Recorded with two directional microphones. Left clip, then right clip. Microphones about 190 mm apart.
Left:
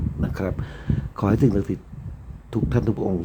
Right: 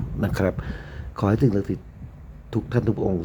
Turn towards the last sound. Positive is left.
turn(degrees=0)  # may be behind; listen again after turning